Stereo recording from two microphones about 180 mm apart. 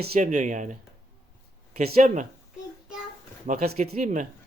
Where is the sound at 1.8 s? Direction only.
50° right (ahead or behind).